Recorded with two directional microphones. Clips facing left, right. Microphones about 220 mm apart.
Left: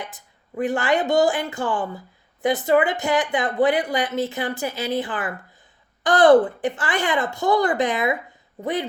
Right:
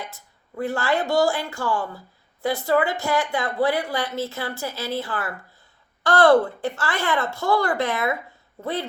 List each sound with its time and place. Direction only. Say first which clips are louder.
0.0 s a woman's voice: left 1 dB; 15° left (ahead or behind)